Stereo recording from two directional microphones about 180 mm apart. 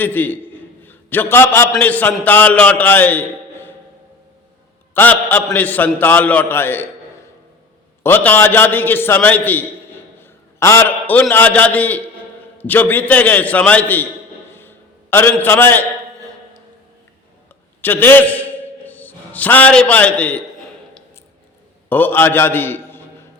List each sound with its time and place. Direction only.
0.0 s a sound: 10° left (ahead or behind)
1.7 s a man's voice: 10° left (ahead or behind)
4.9 s a man's voice: 10° left (ahead or behind)
8.0 s a man's voice: 10° left (ahead or behind)
15.1 s a man's voice: 10° left (ahead or behind)
17.7 s a man's voice: 10° left (ahead or behind)
21.8 s a man's voice: 10° left (ahead or behind)